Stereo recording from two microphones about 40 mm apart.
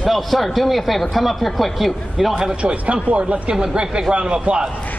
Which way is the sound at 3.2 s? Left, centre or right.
Right.